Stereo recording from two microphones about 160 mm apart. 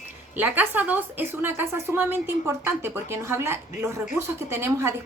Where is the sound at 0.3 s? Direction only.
10° right (ahead or behind).